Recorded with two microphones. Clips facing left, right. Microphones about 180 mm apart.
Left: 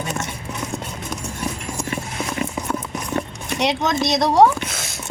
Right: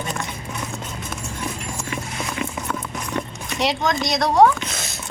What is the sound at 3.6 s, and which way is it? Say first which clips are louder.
Speech: left 1 dB; 20° left (ahead or behind).